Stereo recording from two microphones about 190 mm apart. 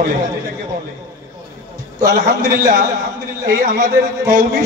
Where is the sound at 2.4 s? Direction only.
15° right (ahead or behind).